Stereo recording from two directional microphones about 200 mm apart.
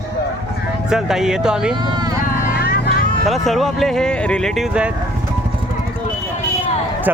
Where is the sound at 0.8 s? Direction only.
Centre (ahead or behind).